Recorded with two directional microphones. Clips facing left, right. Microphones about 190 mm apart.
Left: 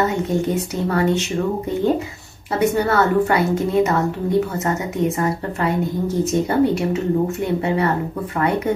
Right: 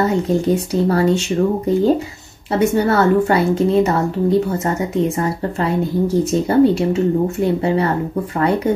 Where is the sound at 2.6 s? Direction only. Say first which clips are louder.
Right 2 dB; 30° right (ahead or behind).